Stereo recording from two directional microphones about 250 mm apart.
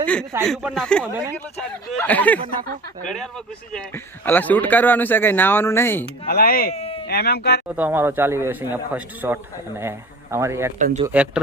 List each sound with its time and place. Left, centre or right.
0.0 s a sound: centre
0.4 s speech: centre
3.7 s speech: centre
6.2 s speech: left
6.7 s a sound: left
7.1 s speech: left
7.8 s a man's voice: centre
10.8 s speech: right
11.0 s speech: centre